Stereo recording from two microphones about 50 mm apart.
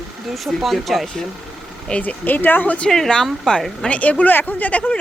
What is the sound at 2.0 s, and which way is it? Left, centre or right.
Speech, left.